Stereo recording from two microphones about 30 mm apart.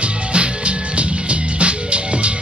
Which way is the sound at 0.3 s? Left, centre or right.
Right.